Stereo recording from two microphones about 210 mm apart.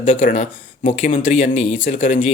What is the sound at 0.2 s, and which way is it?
Speech, 40° left (ahead or behind).